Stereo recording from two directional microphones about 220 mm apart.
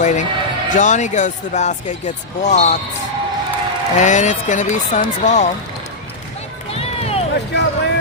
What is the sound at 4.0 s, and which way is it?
Speech, 35° left (ahead or behind).